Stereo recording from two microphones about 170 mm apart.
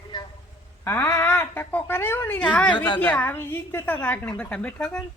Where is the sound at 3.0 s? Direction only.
10° left (ahead or behind).